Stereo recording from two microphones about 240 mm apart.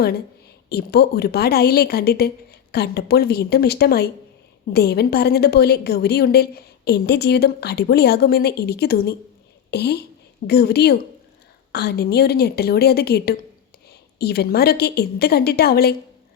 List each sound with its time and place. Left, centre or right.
0.7 s a woman's voice: left